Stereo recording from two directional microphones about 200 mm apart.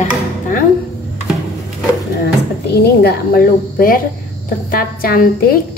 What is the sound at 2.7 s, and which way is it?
A woman's voice, 55° left (ahead or behind).